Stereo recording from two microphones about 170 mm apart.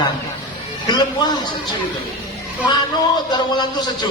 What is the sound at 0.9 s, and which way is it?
Speech, 25° left (ahead or behind).